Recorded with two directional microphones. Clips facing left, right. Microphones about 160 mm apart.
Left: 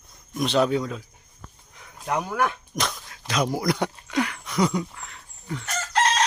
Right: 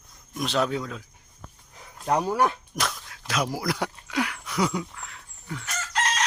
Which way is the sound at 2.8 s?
Centre (ahead or behind).